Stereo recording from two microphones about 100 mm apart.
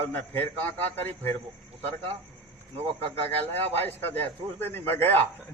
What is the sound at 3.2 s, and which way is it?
Speech, 90° right.